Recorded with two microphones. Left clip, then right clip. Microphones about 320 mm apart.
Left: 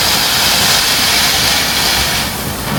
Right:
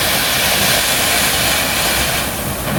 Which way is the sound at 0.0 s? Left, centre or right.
Centre.